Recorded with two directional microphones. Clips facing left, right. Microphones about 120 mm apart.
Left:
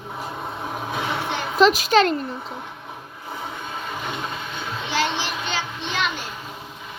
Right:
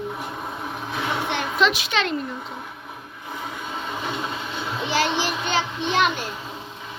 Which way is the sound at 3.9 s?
Centre (ahead or behind).